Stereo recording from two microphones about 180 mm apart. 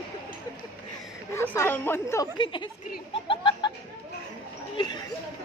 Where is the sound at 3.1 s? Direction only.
25° left (ahead or behind).